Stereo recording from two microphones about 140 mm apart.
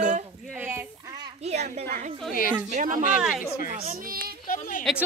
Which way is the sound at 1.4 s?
55° right (ahead or behind).